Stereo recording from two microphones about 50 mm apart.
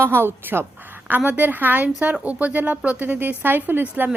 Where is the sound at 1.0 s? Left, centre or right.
Right.